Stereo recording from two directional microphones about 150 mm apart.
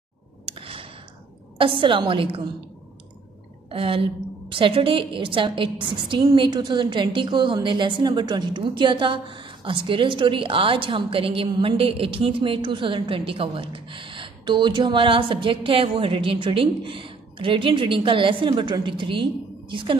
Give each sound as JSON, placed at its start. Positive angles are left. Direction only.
{"t": 0.5, "sound": "a sound", "side_deg": -40}
{"t": 1.6, "sound": "a woman's voice", "side_deg": -35}
{"t": 3.7, "sound": "a woman's voice", "side_deg": -40}